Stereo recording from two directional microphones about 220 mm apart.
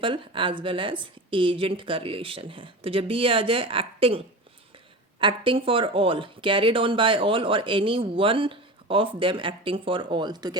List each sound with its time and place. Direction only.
0.0 s speech: 20° right (ahead or behind)
5.2 s speech: 25° right (ahead or behind)